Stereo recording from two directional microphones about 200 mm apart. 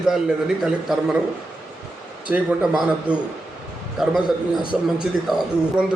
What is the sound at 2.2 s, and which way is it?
A man's voice, 5° right (ahead or behind).